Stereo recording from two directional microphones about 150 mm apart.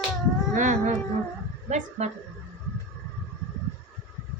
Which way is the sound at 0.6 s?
55° right (ahead or behind).